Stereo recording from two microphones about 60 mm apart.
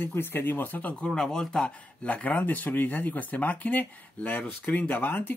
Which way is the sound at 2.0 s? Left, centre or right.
Left.